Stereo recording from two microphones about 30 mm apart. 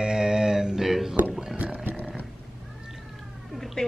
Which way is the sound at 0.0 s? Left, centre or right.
Right.